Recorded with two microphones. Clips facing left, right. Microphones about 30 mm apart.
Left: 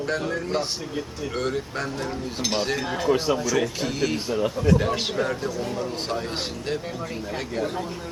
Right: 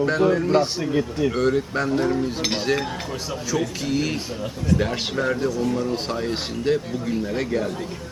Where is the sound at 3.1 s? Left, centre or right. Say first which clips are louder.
Left 9 dB; left.